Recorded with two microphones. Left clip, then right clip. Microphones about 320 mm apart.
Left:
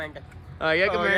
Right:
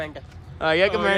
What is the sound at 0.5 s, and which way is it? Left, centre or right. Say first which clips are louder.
Speech: right 2 dB; centre.